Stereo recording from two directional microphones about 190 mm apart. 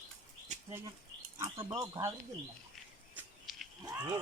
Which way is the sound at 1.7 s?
15° right (ahead or behind).